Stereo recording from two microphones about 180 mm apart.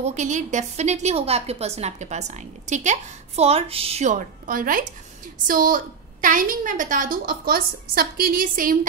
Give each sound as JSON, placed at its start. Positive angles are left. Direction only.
{"t": 0.0, "sound": "a woman's voice", "side_deg": -40}